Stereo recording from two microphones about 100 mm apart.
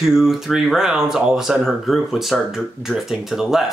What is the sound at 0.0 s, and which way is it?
Speech, 5° right (ahead or behind).